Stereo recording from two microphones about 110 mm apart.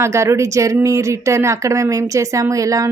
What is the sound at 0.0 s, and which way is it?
Speech, 25° right (ahead or behind).